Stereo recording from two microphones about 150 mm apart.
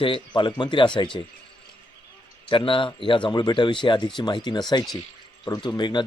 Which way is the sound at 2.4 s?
35° left (ahead or behind).